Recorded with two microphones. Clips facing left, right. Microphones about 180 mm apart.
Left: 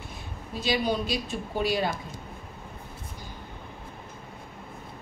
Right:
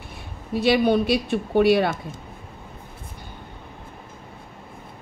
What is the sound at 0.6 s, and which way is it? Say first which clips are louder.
Speech: right 8 dB; 60° right (ahead or behind).